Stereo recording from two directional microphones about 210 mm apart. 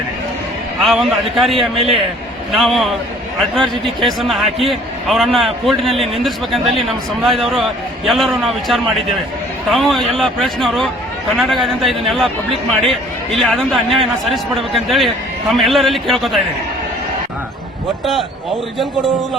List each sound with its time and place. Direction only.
0.9 s a man's voice: centre (ahead or behind)
1.8 s a man's voice: 25° right (ahead or behind)
2.5 s a man's voice: centre (ahead or behind)
13.4 s a man's voice: centre (ahead or behind)
18.0 s a man's voice: centre (ahead or behind)